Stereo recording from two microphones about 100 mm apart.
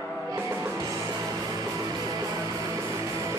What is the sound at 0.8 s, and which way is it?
Music, 40° right (ahead or behind).